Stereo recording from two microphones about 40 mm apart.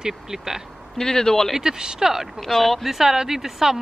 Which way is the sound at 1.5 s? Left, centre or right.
Centre.